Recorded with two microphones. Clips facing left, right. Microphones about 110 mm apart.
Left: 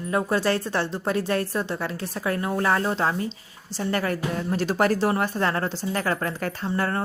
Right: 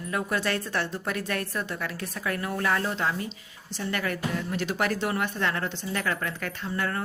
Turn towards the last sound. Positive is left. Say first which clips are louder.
# left 4 dB
turn(degrees=35)  # may be behind; listen again after turning